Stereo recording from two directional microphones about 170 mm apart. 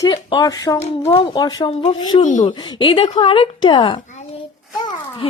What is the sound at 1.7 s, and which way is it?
Speech, 35° left (ahead or behind).